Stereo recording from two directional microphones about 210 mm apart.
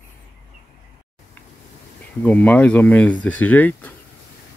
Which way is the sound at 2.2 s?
5° left (ahead or behind).